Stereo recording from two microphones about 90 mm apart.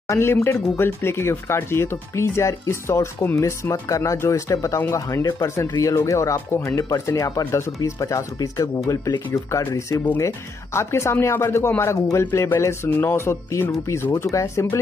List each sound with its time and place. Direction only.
0.1 s speech: 25° left (ahead or behind)